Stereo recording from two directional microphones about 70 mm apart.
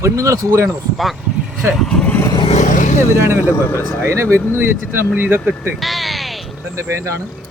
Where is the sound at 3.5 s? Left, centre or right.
Left.